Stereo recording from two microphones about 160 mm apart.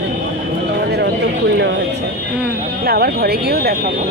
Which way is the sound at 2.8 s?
75° right (ahead or behind).